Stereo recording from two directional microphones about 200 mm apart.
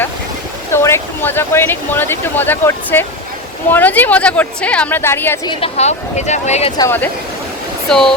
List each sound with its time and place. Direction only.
0.7 s speech: 15° left (ahead or behind)
5.5 s speech: 30° left (ahead or behind)
6.7 s speech: 10° left (ahead or behind)